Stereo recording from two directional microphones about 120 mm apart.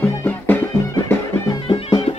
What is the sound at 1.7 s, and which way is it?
Music, 40° left (ahead or behind).